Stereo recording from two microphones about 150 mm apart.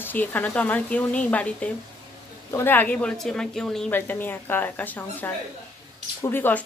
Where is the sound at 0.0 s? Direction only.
10° left (ahead or behind).